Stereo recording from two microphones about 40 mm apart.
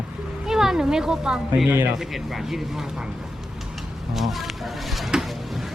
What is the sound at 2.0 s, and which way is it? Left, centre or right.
Speech, centre.